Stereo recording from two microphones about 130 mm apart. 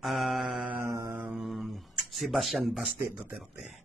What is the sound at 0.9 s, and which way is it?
Mantra, 25° right (ahead or behind).